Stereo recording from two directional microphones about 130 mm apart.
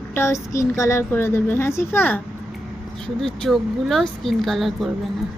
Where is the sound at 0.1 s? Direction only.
20° left (ahead or behind).